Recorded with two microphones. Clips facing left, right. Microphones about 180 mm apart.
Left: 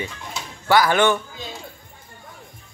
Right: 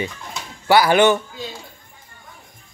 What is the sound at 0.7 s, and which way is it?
Speech, 15° right (ahead or behind).